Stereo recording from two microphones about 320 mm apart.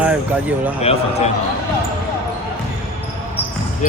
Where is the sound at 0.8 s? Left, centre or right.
Centre.